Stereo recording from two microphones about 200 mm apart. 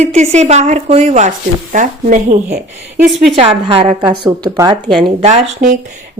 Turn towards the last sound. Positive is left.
turn(degrees=-35)  # may be behind; listen again after turning